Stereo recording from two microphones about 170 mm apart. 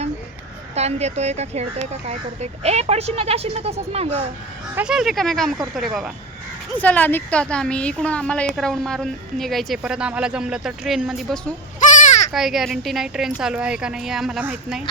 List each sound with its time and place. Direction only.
0.8 s speech: 40° right (ahead or behind)
4.7 s speech: 5° right (ahead or behind)
6.7 s speech: 10° left (ahead or behind)
11.8 s sheep: 45° left (ahead or behind)
12.3 s speech: centre (ahead or behind)